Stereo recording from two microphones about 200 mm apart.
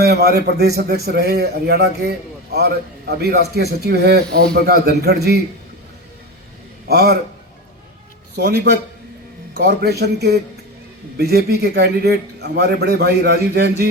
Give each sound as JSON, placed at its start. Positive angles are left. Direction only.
{"t": 0.0, "sound": "a man's voice", "side_deg": -55}
{"t": 6.8, "sound": "a man's voice", "side_deg": -50}
{"t": 8.4, "sound": "a man's voice", "side_deg": -50}